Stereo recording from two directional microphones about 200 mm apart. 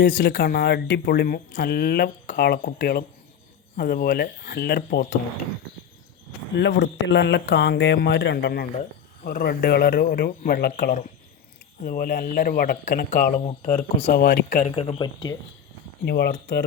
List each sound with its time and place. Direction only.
0.0 s speech: 55° left (ahead or behind)
6.6 s speech: 60° left (ahead or behind); by 13.3 s 45° left (ahead or behind)
13.4 s speech: 30° left (ahead or behind)
14.1 s speech: 55° left (ahead or behind)
14.5 s speech: 35° left (ahead or behind)
16.0 s speech: 55° left (ahead or behind)